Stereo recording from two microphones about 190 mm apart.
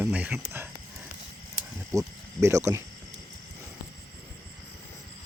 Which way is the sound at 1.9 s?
15° right (ahead or behind).